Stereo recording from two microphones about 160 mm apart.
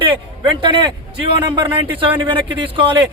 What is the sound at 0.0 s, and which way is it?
Speech, 30° right (ahead or behind).